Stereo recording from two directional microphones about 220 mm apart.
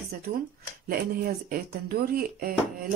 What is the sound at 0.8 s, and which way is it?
Speech, 40° right (ahead or behind).